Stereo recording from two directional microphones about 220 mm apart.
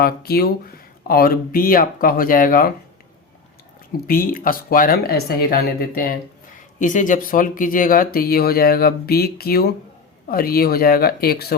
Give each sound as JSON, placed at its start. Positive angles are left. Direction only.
{"t": 0.0, "sound": "speech", "side_deg": 45}
{"t": 4.0, "sound": "speech", "side_deg": 40}